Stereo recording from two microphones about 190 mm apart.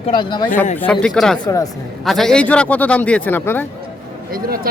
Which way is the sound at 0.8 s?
5° left (ahead or behind).